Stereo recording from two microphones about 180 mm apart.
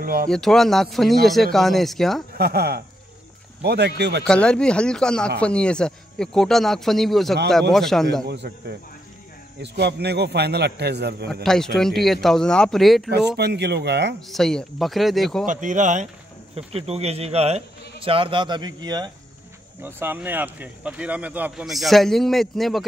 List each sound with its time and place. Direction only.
0.0 s speech: 55° right (ahead or behind)
0.3 s speech: centre (ahead or behind)
2.3 s speech: 60° right (ahead or behind)
4.3 s speech: 5° left (ahead or behind)
8.3 s a man's voice: 65° right (ahead or behind)
11.4 s speech: 5° left (ahead or behind)
13.4 s a man's voice: 65° right (ahead or behind)
14.2 s speech: centre (ahead or behind)
15.4 s a man's voice: 45° right (ahead or behind); by 19.1 s 25° right (ahead or behind)
19.8 s speech: 15° right (ahead or behind)